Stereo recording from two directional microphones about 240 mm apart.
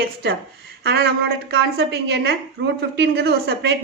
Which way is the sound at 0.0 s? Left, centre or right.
Right.